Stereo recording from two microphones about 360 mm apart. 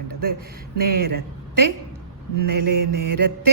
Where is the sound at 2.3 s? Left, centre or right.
Right.